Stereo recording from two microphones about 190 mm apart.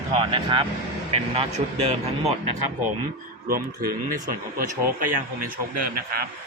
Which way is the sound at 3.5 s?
50° right (ahead or behind).